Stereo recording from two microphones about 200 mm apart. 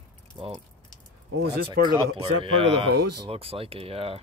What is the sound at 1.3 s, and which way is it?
Speech, 55° right (ahead or behind).